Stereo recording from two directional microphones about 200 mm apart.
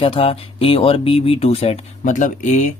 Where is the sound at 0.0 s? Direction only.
30° left (ahead or behind).